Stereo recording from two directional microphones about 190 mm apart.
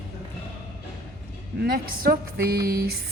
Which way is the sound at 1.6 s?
55° right (ahead or behind).